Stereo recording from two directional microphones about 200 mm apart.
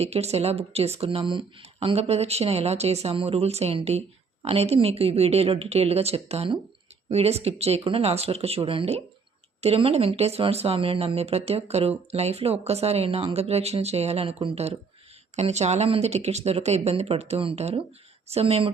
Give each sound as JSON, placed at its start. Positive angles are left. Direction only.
{"t": 0.0, "sound": "speech", "side_deg": -30}